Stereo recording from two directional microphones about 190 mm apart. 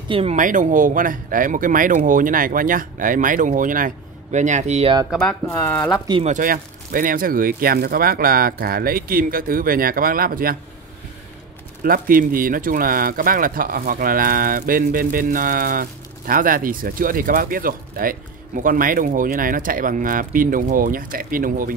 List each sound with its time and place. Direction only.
0.1 s speech: 35° right (ahead or behind)
5.1 s speech: 5° left (ahead or behind)
6.2 s speech: 45° right (ahead or behind)
11.8 s speech: 50° right (ahead or behind)